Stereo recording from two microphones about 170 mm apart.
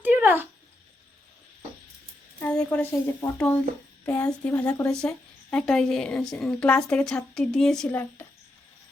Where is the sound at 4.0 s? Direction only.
5° left (ahead or behind).